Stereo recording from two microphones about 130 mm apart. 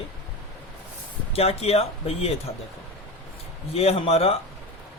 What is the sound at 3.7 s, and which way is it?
Speech, 50° left (ahead or behind).